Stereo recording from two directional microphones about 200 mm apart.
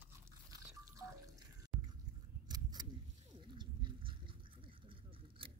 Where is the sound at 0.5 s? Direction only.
15° right (ahead or behind).